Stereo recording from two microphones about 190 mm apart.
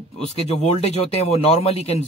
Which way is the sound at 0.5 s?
35° left (ahead or behind).